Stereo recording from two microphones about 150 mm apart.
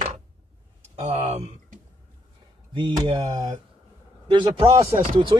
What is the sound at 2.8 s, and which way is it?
Speech, 35° right (ahead or behind).